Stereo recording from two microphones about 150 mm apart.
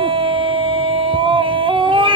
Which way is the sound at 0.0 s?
35° right (ahead or behind).